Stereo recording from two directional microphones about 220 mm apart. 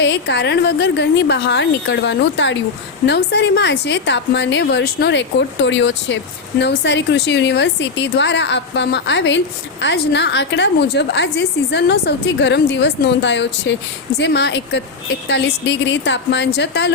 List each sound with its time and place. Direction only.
0.0 s a woman's voice: 50° left (ahead or behind)